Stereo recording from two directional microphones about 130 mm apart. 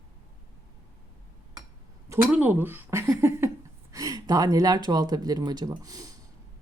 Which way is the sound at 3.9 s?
30° right (ahead or behind).